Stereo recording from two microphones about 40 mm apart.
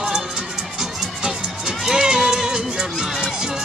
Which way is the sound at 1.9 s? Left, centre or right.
Centre.